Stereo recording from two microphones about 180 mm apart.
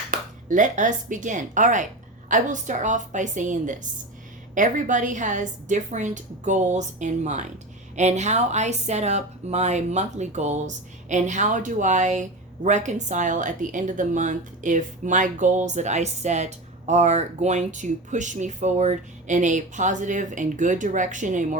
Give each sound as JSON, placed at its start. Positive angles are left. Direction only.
{"t": 0.1, "sound": "a woman's voice", "side_deg": -45}